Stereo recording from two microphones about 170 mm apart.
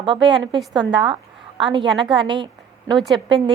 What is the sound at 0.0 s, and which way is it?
A woman's voice, 30° right (ahead or behind).